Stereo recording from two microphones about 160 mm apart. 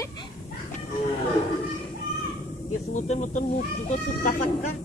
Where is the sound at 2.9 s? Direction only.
50° left (ahead or behind).